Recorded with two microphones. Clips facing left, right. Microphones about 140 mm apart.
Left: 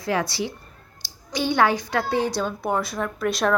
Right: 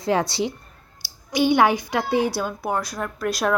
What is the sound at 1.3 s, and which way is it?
A woman's voice, 15° right (ahead or behind).